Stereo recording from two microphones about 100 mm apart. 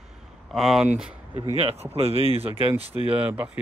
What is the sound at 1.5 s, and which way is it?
Speech, 80° right.